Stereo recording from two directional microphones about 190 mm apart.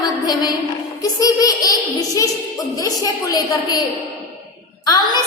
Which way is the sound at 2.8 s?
20° left (ahead or behind).